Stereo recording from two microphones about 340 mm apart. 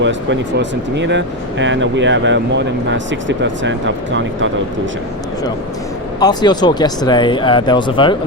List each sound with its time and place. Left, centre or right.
0.0 s speech: right
6.1 s speech: centre